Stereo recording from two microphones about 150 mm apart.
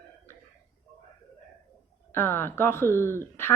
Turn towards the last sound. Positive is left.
turn(degrees=15)  # may be behind; listen again after turning